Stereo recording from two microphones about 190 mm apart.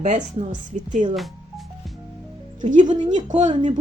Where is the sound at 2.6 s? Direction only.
45° right (ahead or behind).